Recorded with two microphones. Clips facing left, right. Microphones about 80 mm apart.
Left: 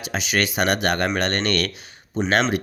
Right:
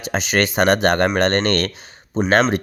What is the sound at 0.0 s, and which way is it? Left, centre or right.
Speech, right.